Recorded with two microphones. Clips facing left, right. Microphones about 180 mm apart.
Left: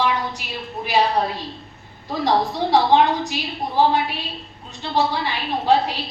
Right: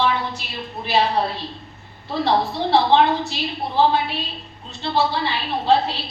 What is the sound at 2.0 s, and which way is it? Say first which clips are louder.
A woman's voice: even; 15° left (ahead or behind).